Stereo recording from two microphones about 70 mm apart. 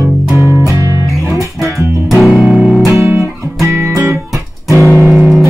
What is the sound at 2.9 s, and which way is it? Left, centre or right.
Music, right.